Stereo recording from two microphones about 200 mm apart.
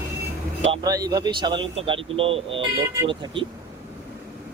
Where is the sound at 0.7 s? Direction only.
20° right (ahead or behind).